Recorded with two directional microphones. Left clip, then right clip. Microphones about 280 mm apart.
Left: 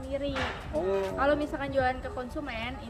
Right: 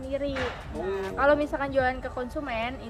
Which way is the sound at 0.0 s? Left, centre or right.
Centre.